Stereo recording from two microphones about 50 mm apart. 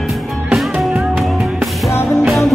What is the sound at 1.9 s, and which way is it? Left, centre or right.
Music, left.